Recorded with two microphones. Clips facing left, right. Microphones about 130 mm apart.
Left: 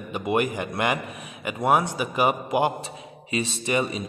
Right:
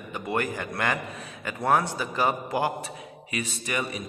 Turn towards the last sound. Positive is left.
turn(degrees=25)  # may be behind; listen again after turning